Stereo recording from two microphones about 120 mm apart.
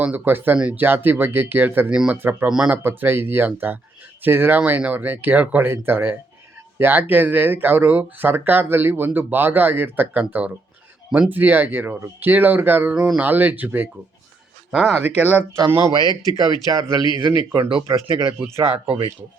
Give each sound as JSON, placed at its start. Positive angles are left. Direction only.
{"t": 0.0, "sound": "speech", "side_deg": -15}
{"t": 14.7, "sound": "speech", "side_deg": -5}
{"t": 15.9, "sound": "speech", "side_deg": -40}
{"t": 17.6, "sound": "speech", "side_deg": -45}
{"t": 17.8, "sound": "speech", "side_deg": -25}
{"t": 18.6, "sound": "speech", "side_deg": -50}